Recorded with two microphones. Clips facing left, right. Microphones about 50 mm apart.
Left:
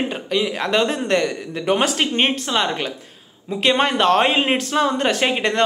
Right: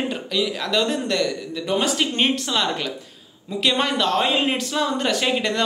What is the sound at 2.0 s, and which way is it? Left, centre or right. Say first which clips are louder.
A woman's voice: left 2 dB; left.